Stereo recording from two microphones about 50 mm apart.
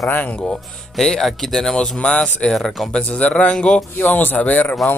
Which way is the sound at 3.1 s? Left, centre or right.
Left.